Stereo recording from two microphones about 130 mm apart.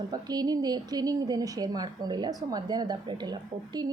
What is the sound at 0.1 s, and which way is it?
A woman's voice, 30° right (ahead or behind).